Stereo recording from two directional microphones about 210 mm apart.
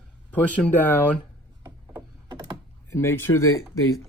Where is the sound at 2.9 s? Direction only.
10° left (ahead or behind).